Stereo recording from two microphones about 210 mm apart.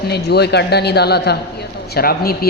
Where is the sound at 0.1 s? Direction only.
50° left (ahead or behind).